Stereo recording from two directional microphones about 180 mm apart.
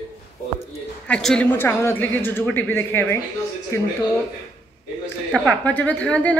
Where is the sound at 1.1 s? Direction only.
5° left (ahead or behind).